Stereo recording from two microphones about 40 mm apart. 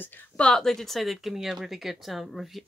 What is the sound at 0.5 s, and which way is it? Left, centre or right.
Speech, centre.